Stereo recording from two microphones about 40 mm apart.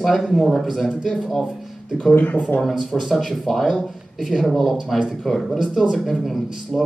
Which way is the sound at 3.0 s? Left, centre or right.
Centre.